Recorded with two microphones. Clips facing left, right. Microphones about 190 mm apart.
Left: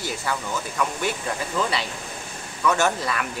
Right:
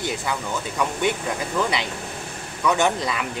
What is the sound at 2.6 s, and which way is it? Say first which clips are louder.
Speech: right 1 dB; 15° right (ahead or behind).